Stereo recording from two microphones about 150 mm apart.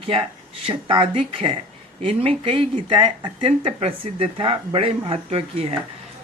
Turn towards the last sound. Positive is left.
turn(degrees=-40)  # may be behind; listen again after turning